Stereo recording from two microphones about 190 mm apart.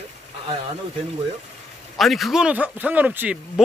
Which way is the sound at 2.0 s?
Centre (ahead or behind).